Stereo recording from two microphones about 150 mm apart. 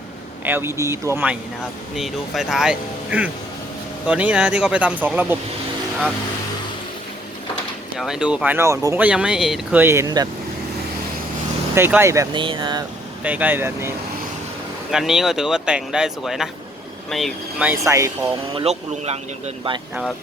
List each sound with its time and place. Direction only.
0.4 s speech: 15° right (ahead or behind)
2.0 s speech: centre (ahead or behind)
7.9 s speech: 5° right (ahead or behind); by 9.0 s 20° right (ahead or behind)
9.0 s speech: 5° right (ahead or behind)
9.8 s speech: 20° right (ahead or behind)
11.7 s speech: 15° right (ahead or behind)
12.4 s speech: 35° right (ahead or behind)
13.2 s speech: 10° right (ahead or behind)
14.9 s speech: 5° right (ahead or behind)
17.6 s speech: 15° right (ahead or behind)
18.5 s speech: 45° right (ahead or behind)